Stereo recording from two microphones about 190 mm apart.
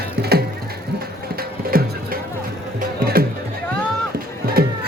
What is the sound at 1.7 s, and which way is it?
Music, 50° right (ahead or behind).